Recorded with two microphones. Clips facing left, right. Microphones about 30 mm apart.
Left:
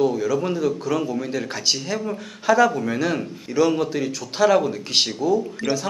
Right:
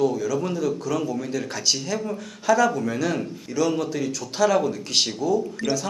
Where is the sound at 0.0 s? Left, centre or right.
Centre.